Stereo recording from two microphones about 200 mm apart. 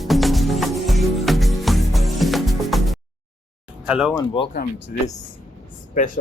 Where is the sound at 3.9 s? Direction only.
Centre (ahead or behind).